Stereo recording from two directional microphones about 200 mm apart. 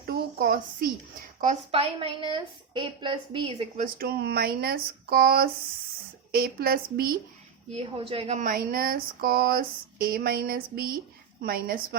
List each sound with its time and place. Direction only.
0.0 s a sound: 50° right (ahead or behind)
1.4 s a woman's voice: 35° right (ahead or behind)
3.8 s speech: 50° right (ahead or behind)
7.7 s speech: 30° right (ahead or behind); by 11.9 s 50° right (ahead or behind)